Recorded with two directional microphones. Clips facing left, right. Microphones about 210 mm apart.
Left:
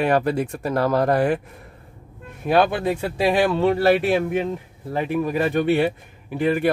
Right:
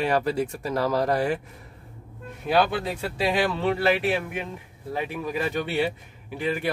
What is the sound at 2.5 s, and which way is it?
A man's voice, 50° left (ahead or behind).